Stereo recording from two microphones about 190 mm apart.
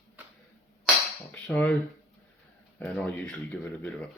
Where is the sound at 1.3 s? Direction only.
5° left (ahead or behind).